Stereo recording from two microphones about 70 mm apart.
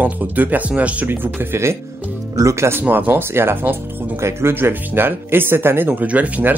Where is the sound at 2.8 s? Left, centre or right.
Right.